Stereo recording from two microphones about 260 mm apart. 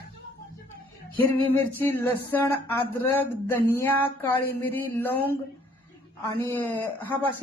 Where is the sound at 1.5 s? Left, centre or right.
Centre.